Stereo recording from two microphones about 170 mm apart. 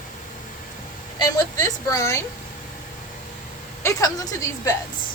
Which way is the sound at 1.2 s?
20° left (ahead or behind).